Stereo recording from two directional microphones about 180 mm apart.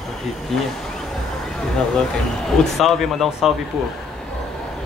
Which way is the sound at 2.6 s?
Centre (ahead or behind).